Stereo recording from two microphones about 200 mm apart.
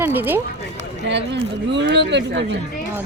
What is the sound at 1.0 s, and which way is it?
Speech, 60° right (ahead or behind).